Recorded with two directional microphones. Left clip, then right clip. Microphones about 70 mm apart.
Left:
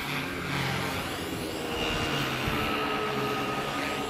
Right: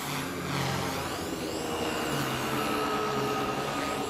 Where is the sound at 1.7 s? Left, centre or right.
Left.